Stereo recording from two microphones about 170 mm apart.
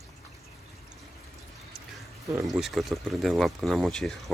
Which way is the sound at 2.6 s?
Centre (ahead or behind).